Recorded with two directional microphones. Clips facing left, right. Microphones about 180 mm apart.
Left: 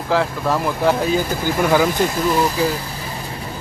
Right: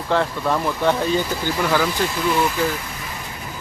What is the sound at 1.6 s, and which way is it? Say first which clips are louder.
Speech: left 5 dB; 15° left (ahead or behind).